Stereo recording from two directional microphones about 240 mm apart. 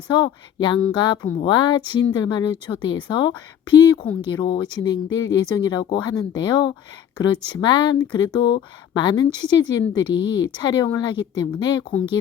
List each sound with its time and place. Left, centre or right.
0.1 s a woman's voice: centre